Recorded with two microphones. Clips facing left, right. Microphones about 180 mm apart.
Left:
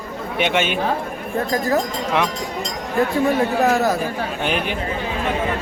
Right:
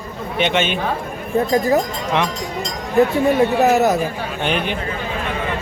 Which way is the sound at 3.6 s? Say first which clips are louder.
Right 3 dB; 20° right (ahead or behind).